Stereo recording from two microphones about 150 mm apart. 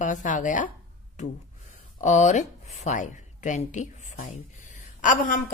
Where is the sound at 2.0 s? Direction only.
55° left (ahead or behind).